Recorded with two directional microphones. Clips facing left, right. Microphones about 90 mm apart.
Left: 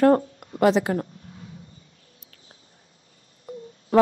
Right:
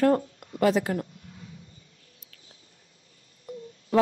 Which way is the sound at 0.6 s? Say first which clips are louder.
Left 4 dB; 80° left.